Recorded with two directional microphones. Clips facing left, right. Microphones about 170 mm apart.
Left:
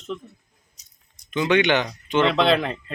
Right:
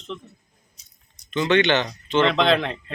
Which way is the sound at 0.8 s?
40° left (ahead or behind).